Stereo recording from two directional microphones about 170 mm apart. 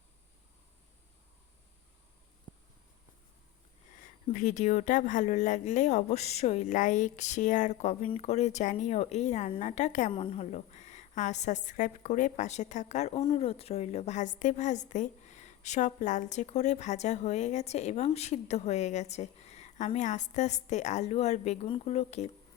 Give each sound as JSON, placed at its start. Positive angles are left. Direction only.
{"t": 2.5, "sound": "a sound", "side_deg": 30}
{"t": 4.3, "sound": "a woman's voice", "side_deg": 50}
{"t": 10.1, "sound": "a woman's voice", "side_deg": 30}